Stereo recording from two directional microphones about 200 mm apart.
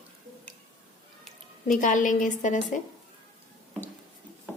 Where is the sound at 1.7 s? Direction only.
40° left (ahead or behind).